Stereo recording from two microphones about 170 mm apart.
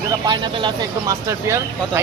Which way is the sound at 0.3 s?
25° right (ahead or behind).